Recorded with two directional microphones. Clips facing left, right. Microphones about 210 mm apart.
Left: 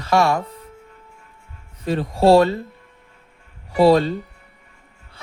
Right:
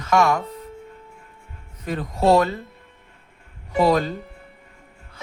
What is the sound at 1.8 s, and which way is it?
Speech, 30° left (ahead or behind).